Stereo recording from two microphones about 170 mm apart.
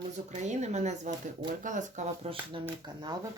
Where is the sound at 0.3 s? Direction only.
45° right (ahead or behind).